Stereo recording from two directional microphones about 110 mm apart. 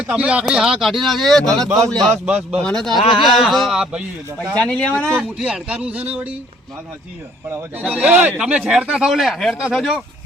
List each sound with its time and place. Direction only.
0.0 s speech: 10° right (ahead or behind); by 2.2 s 5° left (ahead or behind)
2.2 s speech: 10° right (ahead or behind)
2.6 s speech: 5° left (ahead or behind)
3.0 s speech: 50° left (ahead or behind)
3.3 s speech: centre (ahead or behind)
4.6 s speech: 10° left (ahead or behind)
5.4 s speech: 10° right (ahead or behind)
7.8 s speech: 15° right (ahead or behind)